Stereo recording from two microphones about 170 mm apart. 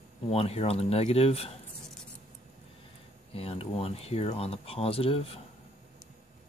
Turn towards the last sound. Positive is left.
turn(degrees=35)  # may be behind; listen again after turning